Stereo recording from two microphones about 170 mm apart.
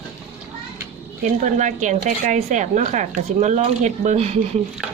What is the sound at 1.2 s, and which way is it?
A woman's voice, 45° right (ahead or behind).